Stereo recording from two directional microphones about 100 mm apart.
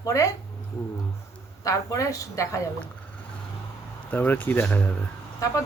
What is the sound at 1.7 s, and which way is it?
A woman's voice, 35° left (ahead or behind).